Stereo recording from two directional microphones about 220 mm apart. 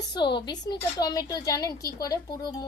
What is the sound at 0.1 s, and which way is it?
A woman's voice, 20° left (ahead or behind).